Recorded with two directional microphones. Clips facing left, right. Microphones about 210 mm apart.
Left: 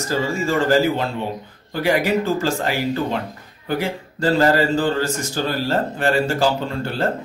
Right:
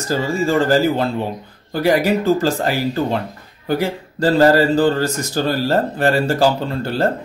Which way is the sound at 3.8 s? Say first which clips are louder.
Right 3 dB; 35° right (ahead or behind).